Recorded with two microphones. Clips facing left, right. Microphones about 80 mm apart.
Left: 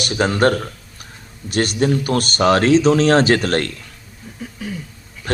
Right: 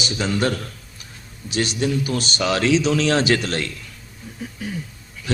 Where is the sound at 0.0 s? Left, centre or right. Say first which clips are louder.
Left 6 dB; left.